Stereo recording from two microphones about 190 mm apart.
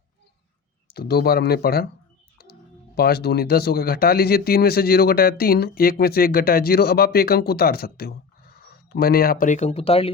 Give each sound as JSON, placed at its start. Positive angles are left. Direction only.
{"t": 0.9, "sound": "speech", "side_deg": 55}